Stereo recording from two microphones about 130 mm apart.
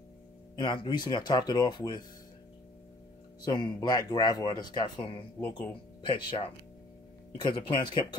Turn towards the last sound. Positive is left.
turn(degrees=35)  # may be behind; listen again after turning